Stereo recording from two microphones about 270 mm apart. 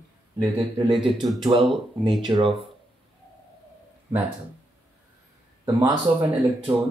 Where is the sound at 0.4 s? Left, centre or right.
Centre.